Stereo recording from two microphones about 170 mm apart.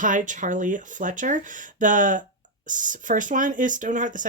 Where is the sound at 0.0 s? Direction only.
50° right (ahead or behind).